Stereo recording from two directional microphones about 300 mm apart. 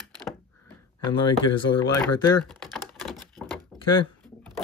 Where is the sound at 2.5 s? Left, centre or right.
Centre.